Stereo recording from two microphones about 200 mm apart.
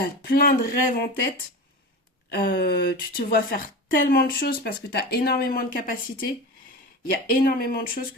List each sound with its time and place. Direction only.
0.0 s speech: 50° left (ahead or behind)
2.3 s speech: 50° left (ahead or behind)